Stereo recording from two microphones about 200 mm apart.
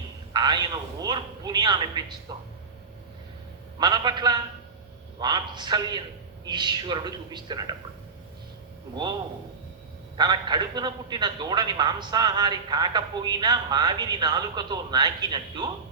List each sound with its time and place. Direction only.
0.3 s a man's voice: 20° right (ahead or behind)
3.8 s a man's voice: 20° right (ahead or behind)
10.2 s a man's voice: 20° right (ahead or behind)